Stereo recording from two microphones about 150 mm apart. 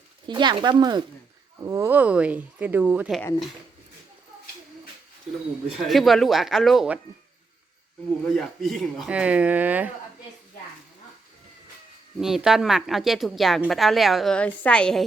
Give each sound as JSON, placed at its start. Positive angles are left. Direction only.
{"t": 0.3, "sound": "speech", "side_deg": -30}
{"t": 1.6, "sound": "speech", "side_deg": -20}
{"t": 5.7, "sound": "a woman's voice", "side_deg": 0}
{"t": 8.2, "sound": "speech", "side_deg": 5}
{"t": 12.2, "sound": "a woman's voice", "side_deg": -5}